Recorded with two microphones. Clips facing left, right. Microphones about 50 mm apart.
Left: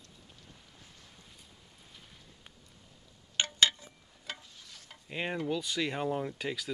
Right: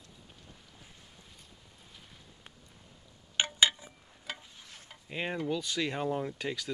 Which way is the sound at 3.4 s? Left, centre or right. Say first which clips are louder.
Right 1 dB; centre.